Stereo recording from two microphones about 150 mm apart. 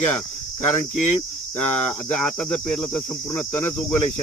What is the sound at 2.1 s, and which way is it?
Cricket, 5° left (ahead or behind).